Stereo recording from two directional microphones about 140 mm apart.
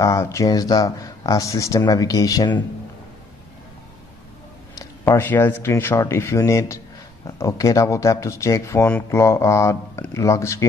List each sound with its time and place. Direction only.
0.0 s speech: 20° left (ahead or behind)
5.0 s speech: 15° left (ahead or behind)